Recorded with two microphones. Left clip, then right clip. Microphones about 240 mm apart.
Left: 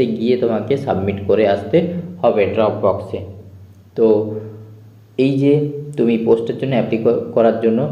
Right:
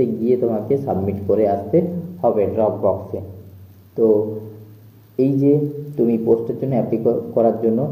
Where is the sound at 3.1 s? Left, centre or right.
Left.